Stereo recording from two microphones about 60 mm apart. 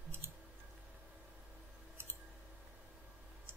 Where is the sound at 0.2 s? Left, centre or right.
Right.